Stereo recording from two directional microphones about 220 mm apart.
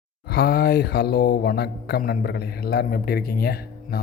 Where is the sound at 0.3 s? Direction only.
45° left (ahead or behind).